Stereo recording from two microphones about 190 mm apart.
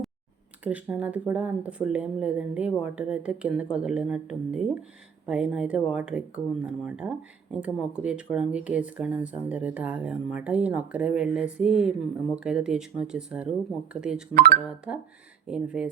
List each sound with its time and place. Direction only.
0.6 s speech: 10° right (ahead or behind)
14.3 s speech: 55° right (ahead or behind)
14.9 s speech: 5° right (ahead or behind)